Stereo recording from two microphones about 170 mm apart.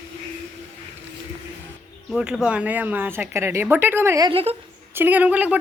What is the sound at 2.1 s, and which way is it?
Speech, centre (ahead or behind).